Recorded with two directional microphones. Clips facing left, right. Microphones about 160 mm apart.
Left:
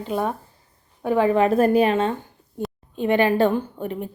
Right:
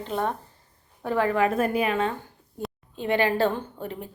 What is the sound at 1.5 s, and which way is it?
A woman's voice, 35° left (ahead or behind).